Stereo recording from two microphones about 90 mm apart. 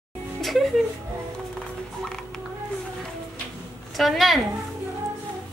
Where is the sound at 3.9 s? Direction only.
Centre (ahead or behind).